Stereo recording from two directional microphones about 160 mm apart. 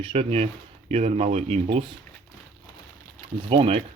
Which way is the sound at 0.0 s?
35° right (ahead or behind).